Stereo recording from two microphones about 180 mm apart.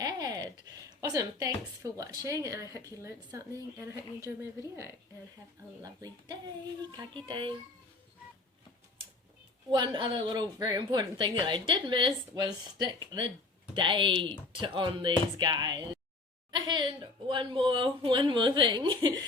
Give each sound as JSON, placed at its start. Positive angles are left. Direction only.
{"t": 0.0, "sound": "a sound", "side_deg": -20}
{"t": 1.8, "sound": "speech", "side_deg": -20}
{"t": 5.8, "sound": "a woman's voice", "side_deg": -20}
{"t": 9.6, "sound": "a woman's voice", "side_deg": -25}